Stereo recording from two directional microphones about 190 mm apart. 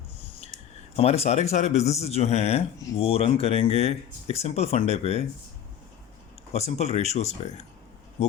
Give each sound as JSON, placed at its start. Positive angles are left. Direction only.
{"t": 0.9, "sound": "speech", "side_deg": 30}
{"t": 6.5, "sound": "speech", "side_deg": 35}